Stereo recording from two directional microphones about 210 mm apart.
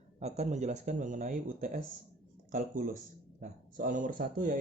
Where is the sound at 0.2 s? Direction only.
30° right (ahead or behind).